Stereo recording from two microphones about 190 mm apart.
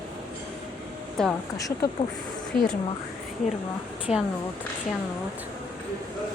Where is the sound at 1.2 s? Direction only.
5° left (ahead or behind).